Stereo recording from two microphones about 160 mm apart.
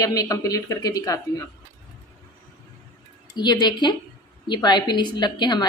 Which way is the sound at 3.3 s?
25° left (ahead or behind).